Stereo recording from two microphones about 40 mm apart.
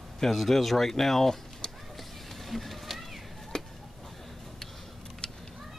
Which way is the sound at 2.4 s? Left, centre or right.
Centre.